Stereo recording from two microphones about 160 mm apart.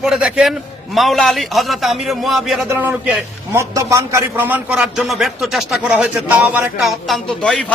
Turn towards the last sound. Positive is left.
turn(degrees=5)  # may be behind; listen again after turning